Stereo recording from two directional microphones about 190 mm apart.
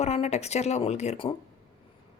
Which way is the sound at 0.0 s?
35° left (ahead or behind).